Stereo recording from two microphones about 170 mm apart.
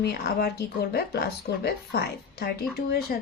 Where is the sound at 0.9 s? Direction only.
70° left (ahead or behind).